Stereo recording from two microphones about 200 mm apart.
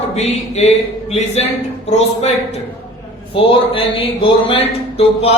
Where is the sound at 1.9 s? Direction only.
35° left (ahead or behind).